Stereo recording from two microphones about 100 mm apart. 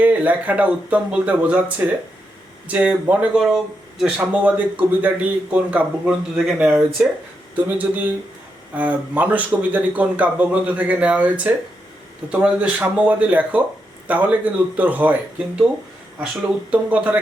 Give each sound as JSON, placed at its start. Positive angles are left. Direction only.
{"t": 0.0, "sound": "a man's voice", "side_deg": -15}
{"t": 3.5, "sound": "speech", "side_deg": -5}
{"t": 4.3, "sound": "a man's voice", "side_deg": -15}
{"t": 16.7, "sound": "a man's voice", "side_deg": -15}